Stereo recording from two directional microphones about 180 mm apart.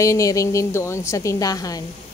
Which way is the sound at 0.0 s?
15° left (ahead or behind).